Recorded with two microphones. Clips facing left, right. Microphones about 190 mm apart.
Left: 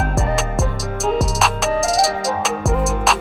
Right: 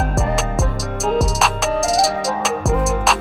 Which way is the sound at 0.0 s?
Centre (ahead or behind).